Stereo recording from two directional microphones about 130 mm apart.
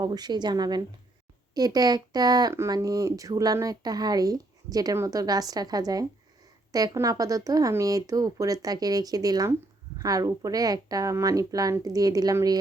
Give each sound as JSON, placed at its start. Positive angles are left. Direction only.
{"t": 0.0, "sound": "speech", "side_deg": -35}